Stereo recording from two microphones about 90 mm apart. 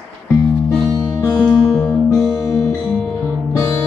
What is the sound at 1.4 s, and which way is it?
Music, 10° left (ahead or behind).